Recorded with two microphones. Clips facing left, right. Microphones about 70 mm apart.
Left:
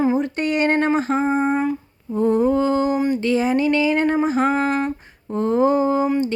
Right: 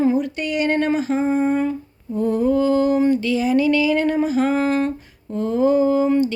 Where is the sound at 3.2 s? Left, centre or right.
Left.